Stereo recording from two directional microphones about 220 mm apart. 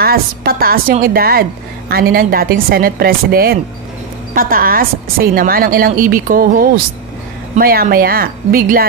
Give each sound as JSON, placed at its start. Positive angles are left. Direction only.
{"t": 0.0, "sound": "a woman's voice", "side_deg": -45}